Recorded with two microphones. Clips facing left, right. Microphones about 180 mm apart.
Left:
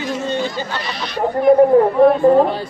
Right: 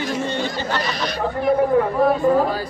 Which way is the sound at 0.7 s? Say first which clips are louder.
Right 2 dB; 45° right (ahead or behind).